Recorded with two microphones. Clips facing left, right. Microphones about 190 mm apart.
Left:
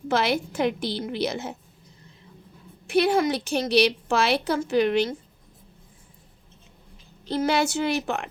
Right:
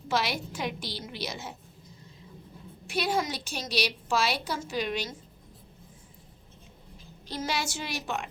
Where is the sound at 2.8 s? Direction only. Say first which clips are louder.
Left 8 dB; 60° left (ahead or behind).